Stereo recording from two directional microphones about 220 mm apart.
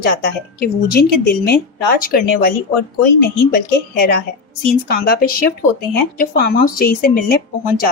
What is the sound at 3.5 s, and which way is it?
A woman's voice, 40° left (ahead or behind).